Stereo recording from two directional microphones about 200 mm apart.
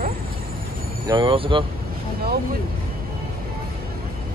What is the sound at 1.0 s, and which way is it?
Speech, 25° right (ahead or behind).